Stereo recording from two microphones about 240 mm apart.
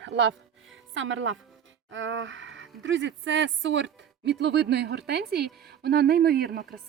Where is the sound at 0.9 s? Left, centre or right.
Right.